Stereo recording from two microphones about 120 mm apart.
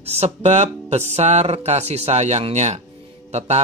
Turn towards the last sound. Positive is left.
turn(degrees=-65)  # may be behind; listen again after turning